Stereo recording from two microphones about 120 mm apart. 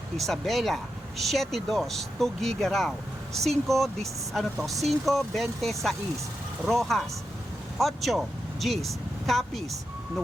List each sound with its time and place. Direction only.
0.2 s speech: centre (ahead or behind)